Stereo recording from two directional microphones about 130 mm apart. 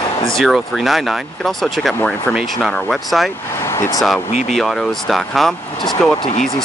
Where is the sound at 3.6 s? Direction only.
20° left (ahead or behind).